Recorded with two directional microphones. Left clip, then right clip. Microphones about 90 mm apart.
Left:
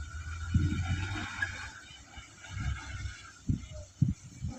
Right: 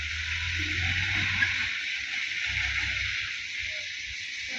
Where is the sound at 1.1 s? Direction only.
Centre (ahead or behind).